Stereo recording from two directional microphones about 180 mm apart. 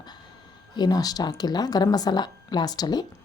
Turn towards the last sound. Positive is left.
turn(degrees=20)  # may be behind; listen again after turning